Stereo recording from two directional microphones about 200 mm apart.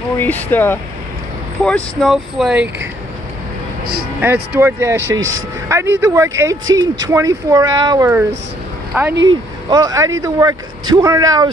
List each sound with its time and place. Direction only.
0.2 s speech: 10° left (ahead or behind); by 2.9 s 5° right (ahead or behind)
4.6 s speech: 15° right (ahead or behind)
9.1 s speech: 75° right (ahead or behind)
9.7 s speech: 20° right (ahead or behind)